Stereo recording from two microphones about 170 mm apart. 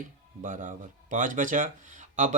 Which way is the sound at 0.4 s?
50° right (ahead or behind).